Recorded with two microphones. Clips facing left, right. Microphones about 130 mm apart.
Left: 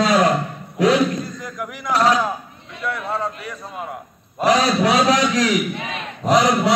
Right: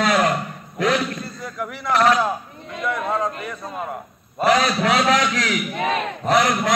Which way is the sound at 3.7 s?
5° left (ahead or behind).